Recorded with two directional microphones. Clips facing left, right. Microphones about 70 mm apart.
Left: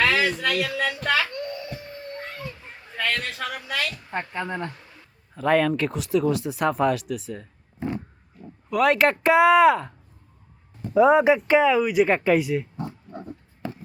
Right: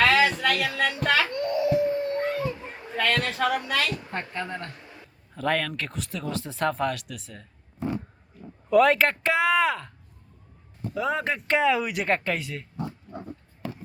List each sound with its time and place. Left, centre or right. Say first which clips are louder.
0.0 s a sound: right 1 dB; centre
2.2 s dog: right 9 dB; centre
2.6 s a sound: right 7 dB; right
3.0 s speech: right 3 dB; centre
4.1 s speech: left 3 dB; centre
4.8 s a sound: right 3 dB; centre
5.3 s speech: left 6 dB; centre
8.7 s speech: even; centre
10.9 s speech: left 11 dB; left
11.2 s speech: left 7 dB; centre